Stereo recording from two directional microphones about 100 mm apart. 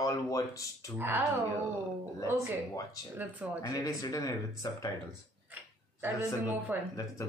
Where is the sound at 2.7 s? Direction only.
35° left (ahead or behind).